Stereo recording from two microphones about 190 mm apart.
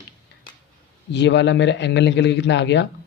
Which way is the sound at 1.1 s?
70° left (ahead or behind).